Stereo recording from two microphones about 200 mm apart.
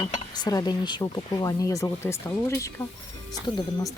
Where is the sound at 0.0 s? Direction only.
20° left (ahead or behind).